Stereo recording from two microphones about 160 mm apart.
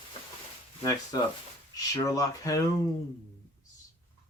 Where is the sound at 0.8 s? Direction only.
25° left (ahead or behind).